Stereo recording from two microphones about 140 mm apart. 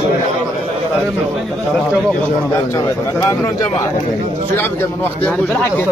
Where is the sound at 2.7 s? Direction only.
20° left (ahead or behind).